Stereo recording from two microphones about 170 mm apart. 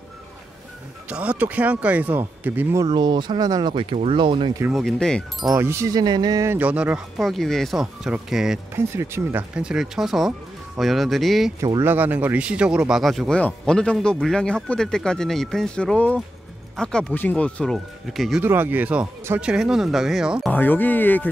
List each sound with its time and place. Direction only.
1.0 s speech: 5° right (ahead or behind)
2.8 s speech: 25° right (ahead or behind)
4.7 s speech: centre (ahead or behind)
5.6 s speech: 15° right (ahead or behind)
8.7 s speech: 15° right (ahead or behind)
11.6 s speech: 15° right (ahead or behind); by 18.4 s centre (ahead or behind)
18.4 s speech: 10° right (ahead or behind)
20.5 s speech: 10° left (ahead or behind)